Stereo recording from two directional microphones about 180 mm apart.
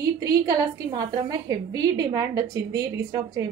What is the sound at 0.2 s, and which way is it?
A woman's voice, 20° right (ahead or behind).